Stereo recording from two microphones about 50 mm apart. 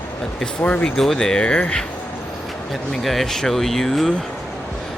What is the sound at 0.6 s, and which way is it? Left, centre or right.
Speech, left.